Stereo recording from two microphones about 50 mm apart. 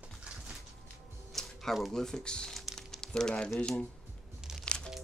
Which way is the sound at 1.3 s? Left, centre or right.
Centre.